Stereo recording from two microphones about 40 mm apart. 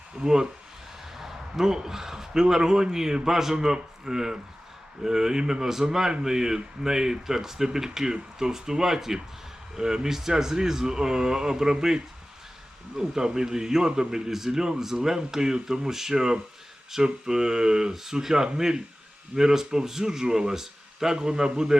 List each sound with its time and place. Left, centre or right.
0.2 s speech: centre
13.0 s speech: centre